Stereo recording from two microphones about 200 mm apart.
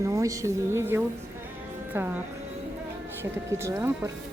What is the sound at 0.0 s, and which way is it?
Speech, 15° right (ahead or behind).